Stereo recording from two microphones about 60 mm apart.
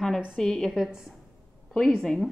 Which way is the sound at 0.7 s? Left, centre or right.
Centre.